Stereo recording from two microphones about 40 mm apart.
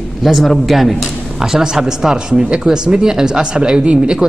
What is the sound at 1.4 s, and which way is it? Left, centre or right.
Speech, centre.